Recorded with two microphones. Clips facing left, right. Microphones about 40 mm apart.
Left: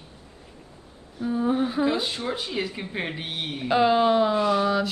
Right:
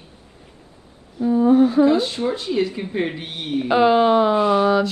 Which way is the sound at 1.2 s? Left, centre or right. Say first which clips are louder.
Right 9 dB; centre.